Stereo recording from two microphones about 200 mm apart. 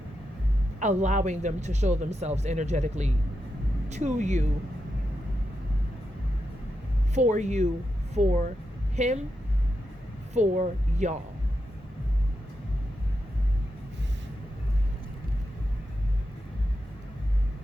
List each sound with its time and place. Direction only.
0.8 s speech: 35° right (ahead or behind)
7.1 s speech: 35° right (ahead or behind)
10.3 s speech: 35° right (ahead or behind)